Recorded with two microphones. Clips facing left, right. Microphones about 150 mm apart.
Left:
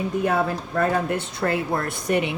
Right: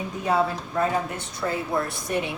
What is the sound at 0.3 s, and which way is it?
Speech, 55° left (ahead or behind).